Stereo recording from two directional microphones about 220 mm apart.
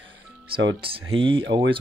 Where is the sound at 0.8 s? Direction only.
25° right (ahead or behind).